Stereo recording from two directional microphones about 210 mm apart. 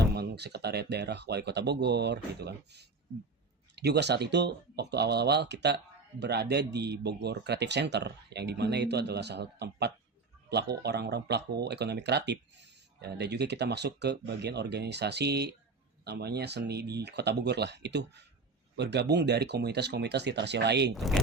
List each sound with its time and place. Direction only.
0.0 s speech: 50° right (ahead or behind)
20.9 s speech: centre (ahead or behind)